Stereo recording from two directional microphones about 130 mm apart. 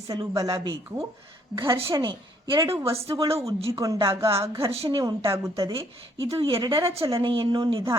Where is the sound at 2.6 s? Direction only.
20° right (ahead or behind).